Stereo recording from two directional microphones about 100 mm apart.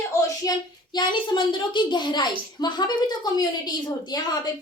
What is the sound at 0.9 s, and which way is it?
A woman's voice, 50° left (ahead or behind).